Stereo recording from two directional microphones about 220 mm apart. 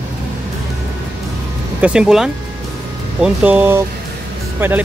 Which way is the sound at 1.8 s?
5° right (ahead or behind).